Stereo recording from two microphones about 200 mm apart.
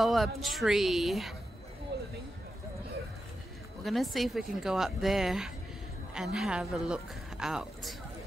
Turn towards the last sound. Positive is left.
turn(degrees=0)  # may be behind; listen again after turning